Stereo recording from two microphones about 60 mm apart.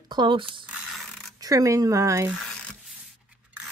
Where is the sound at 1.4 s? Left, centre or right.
Right.